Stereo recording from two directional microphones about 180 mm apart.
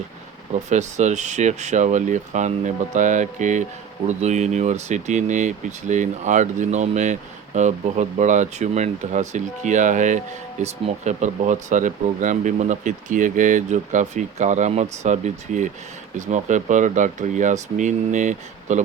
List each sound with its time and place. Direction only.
0.5 s speech: 40° right (ahead or behind)